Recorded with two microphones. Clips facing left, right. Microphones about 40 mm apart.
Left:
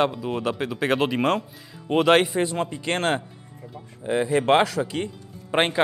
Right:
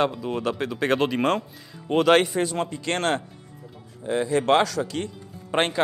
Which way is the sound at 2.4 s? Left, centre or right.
Centre.